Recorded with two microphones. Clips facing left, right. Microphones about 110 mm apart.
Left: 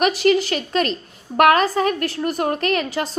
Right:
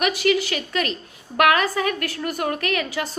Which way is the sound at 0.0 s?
35° left (ahead or behind).